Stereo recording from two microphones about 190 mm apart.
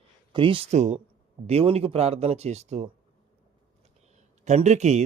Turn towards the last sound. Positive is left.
turn(degrees=-35)  # may be behind; listen again after turning